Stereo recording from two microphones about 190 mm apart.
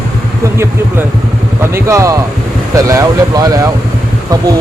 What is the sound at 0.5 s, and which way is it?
Speech, 15° right (ahead or behind).